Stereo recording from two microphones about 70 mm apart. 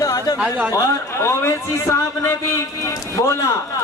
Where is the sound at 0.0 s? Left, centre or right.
Left.